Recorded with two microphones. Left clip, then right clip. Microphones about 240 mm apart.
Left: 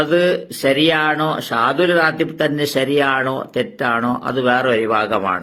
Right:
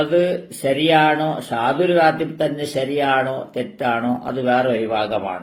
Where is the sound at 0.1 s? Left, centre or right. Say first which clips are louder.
Left 2 dB; left.